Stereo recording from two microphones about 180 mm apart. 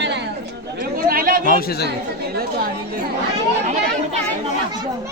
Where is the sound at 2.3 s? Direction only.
55° right (ahead or behind).